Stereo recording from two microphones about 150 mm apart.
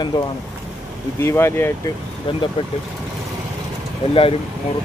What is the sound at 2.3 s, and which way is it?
Speech, 35° left (ahead or behind).